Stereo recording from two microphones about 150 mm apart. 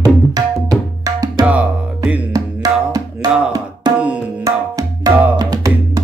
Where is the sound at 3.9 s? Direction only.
25° right (ahead or behind).